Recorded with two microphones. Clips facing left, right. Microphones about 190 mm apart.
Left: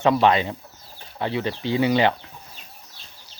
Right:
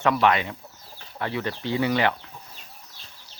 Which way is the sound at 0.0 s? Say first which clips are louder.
Left 3 dB; 30° left (ahead or behind).